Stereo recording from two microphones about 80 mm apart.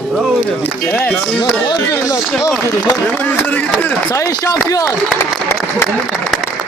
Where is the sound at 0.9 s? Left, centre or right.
Left.